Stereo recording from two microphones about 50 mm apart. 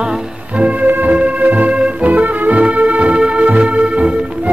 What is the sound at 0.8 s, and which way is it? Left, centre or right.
Music, right.